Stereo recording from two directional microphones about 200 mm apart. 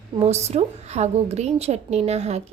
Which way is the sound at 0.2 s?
30° right (ahead or behind).